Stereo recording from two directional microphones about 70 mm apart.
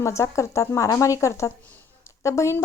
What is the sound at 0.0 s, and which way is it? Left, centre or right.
A woman's voice, left.